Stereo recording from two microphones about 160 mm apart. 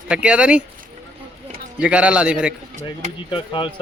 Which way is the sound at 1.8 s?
5° right (ahead or behind).